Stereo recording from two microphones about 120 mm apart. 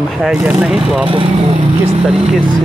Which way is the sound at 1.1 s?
50° right (ahead or behind).